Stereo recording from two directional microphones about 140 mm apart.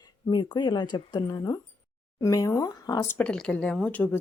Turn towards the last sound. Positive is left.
turn(degrees=10)  # may be behind; listen again after turning